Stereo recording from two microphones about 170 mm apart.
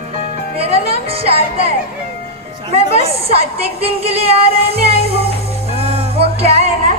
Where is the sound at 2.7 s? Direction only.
35° right (ahead or behind).